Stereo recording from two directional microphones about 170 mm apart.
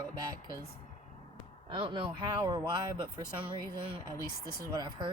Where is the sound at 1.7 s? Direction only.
30° right (ahead or behind).